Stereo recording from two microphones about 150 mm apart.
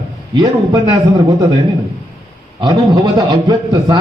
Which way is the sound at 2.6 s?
30° right (ahead or behind).